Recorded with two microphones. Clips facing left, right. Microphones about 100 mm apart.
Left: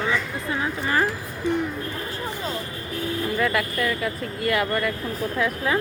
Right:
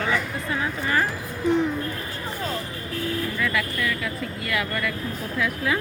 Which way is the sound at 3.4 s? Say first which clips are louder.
Left 4 dB; 45° left (ahead or behind).